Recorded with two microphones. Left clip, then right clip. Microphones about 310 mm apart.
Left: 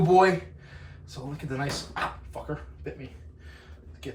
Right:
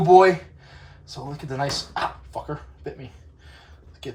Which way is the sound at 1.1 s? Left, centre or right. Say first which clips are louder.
Right 4 dB; centre.